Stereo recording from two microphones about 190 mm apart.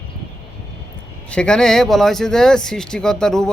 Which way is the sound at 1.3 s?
5° left (ahead or behind).